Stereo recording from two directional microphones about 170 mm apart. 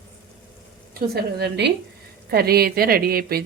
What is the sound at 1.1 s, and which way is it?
Speech, 70° right (ahead or behind).